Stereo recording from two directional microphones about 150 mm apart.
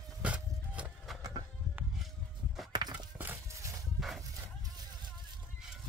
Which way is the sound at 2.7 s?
30° right (ahead or behind).